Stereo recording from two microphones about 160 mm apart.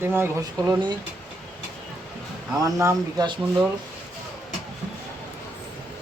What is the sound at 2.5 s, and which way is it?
Speech, 20° right (ahead or behind).